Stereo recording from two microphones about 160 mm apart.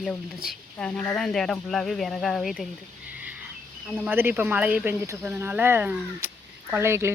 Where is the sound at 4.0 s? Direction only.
10° right (ahead or behind).